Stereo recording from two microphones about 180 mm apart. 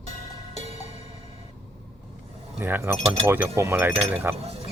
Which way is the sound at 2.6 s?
15° right (ahead or behind).